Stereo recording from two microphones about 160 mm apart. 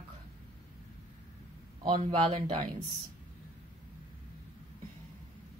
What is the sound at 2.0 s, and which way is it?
Speech, 30° right (ahead or behind).